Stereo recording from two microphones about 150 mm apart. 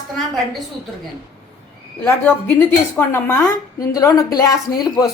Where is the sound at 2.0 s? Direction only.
15° left (ahead or behind).